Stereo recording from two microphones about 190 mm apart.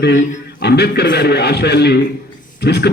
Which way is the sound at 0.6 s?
60° left (ahead or behind).